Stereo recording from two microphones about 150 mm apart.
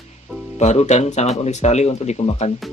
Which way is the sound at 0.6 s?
50° left (ahead or behind).